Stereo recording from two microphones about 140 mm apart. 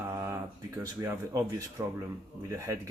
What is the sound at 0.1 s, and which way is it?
Speech, 20° right (ahead or behind).